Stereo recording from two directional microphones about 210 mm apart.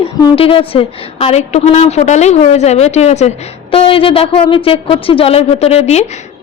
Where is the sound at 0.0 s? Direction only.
25° left (ahead or behind).